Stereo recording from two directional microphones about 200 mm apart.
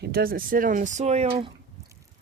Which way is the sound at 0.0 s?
50° right (ahead or behind).